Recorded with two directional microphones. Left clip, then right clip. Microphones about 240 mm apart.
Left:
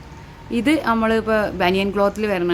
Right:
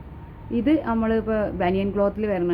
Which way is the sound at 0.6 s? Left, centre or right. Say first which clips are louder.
Left 4 dB; centre.